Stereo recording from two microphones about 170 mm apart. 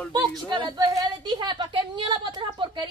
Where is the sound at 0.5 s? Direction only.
25° right (ahead or behind).